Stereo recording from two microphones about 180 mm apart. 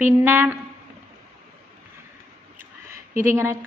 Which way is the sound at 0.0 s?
10° right (ahead or behind).